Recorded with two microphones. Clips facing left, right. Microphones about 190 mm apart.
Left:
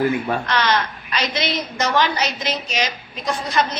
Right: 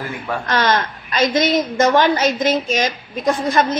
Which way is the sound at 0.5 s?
45° right (ahead or behind).